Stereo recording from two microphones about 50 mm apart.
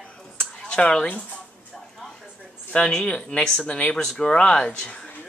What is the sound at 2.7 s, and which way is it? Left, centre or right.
Speech, centre.